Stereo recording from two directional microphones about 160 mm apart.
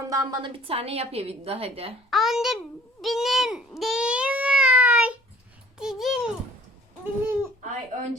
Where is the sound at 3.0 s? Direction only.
Centre (ahead or behind).